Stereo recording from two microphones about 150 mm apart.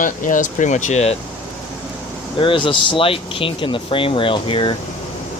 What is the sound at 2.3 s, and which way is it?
Speech, 35° left (ahead or behind).